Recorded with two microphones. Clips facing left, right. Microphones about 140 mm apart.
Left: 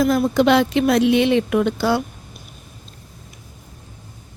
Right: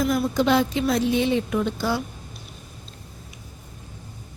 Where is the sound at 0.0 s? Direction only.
70° left (ahead or behind).